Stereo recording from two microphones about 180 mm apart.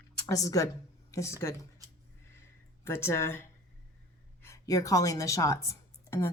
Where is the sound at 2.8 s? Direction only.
15° left (ahead or behind).